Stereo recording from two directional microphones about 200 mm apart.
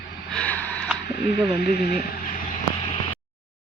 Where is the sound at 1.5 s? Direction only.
50° left (ahead or behind).